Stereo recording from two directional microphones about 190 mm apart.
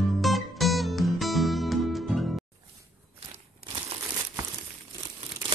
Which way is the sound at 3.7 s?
25° right (ahead or behind).